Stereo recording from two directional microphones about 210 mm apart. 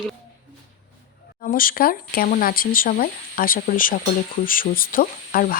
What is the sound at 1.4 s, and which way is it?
Speech, 45° left (ahead or behind).